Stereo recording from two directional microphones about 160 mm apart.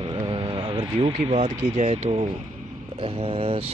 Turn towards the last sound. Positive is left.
turn(degrees=-40)  # may be behind; listen again after turning